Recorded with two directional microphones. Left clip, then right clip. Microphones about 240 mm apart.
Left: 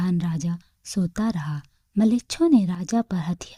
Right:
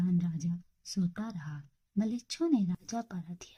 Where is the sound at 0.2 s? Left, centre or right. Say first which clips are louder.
Left 8 dB; left.